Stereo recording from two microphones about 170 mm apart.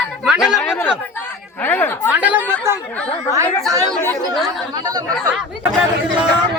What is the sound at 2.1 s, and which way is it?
Speech, 10° right (ahead or behind).